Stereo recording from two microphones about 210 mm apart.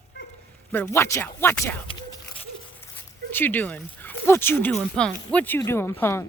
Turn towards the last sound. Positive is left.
turn(degrees=10)  # may be behind; listen again after turning